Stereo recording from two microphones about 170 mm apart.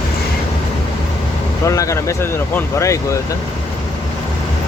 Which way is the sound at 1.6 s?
20° left (ahead or behind).